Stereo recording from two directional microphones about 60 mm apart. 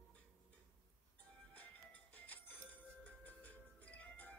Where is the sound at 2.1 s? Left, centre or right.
Left.